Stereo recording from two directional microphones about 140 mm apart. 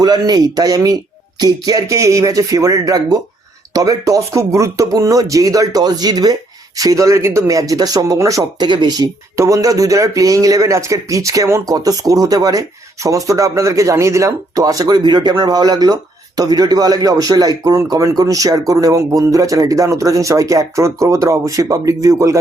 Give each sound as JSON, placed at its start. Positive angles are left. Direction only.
{"t": 0.0, "sound": "speech", "side_deg": -30}